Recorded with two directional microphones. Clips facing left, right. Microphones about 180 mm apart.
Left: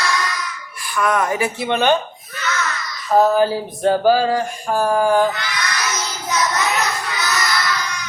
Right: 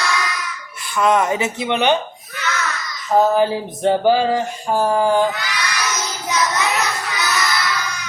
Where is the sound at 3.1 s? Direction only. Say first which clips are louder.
Left 1 dB; 20° right (ahead or behind).